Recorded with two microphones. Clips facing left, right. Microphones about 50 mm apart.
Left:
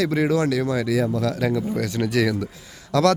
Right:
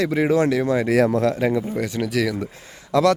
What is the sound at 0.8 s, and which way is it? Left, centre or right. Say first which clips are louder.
Speech: right 4 dB; right.